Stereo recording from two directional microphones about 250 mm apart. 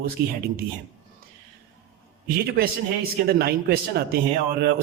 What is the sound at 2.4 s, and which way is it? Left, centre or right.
A man's voice, right.